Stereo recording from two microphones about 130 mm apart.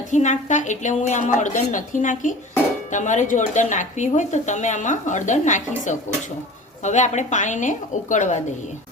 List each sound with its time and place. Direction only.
0.1 s speech: 65° left (ahead or behind)